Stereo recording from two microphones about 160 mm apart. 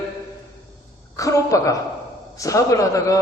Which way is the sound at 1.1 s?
20° left (ahead or behind).